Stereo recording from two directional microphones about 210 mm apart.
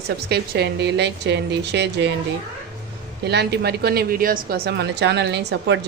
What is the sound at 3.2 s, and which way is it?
Speech, 50° right (ahead or behind).